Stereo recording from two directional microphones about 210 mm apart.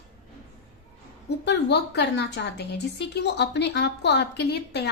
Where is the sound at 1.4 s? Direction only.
55° left (ahead or behind).